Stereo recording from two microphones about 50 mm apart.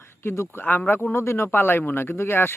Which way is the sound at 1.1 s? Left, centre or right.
Left.